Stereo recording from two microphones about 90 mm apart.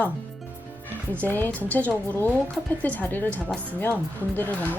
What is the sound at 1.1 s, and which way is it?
Speech, 20° left (ahead or behind).